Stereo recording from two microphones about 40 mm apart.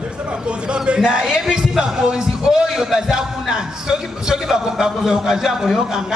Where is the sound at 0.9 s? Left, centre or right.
Centre.